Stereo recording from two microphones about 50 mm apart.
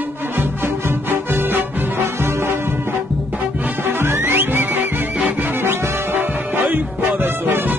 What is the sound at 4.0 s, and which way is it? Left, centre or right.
Music, right.